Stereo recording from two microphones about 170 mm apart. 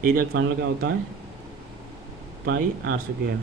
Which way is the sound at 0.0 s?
60° right (ahead or behind).